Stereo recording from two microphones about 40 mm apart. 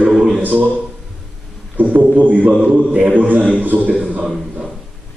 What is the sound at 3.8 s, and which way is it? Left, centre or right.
Speech, right.